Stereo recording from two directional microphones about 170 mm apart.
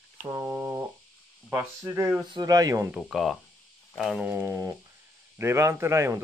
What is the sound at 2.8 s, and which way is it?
Speech, 5° right (ahead or behind).